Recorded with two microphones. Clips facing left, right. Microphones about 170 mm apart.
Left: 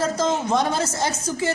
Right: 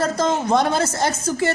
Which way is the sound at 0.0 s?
65° right (ahead or behind).